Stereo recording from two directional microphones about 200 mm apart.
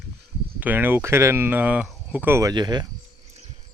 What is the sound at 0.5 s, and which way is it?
Speech, 10° right (ahead or behind).